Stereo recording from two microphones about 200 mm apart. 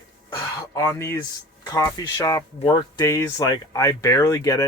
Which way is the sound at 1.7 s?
15° left (ahead or behind).